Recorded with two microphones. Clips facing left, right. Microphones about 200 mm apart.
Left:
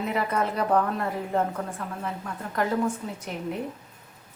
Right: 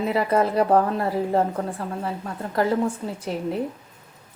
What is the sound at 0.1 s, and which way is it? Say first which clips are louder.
Speech: right 7 dB; 35° right (ahead or behind).